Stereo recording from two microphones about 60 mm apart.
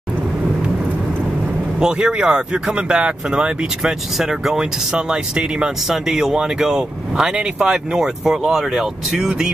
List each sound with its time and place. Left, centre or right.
1.8 s speech: centre